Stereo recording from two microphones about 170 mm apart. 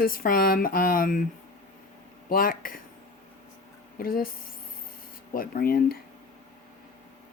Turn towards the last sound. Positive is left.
turn(degrees=60)  # may be behind; listen again after turning